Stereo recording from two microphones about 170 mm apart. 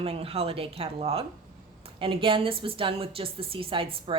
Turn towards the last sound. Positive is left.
turn(degrees=-30)  # may be behind; listen again after turning